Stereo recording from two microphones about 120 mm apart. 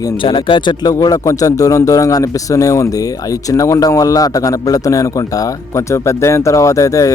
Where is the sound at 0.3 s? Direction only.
45° left (ahead or behind).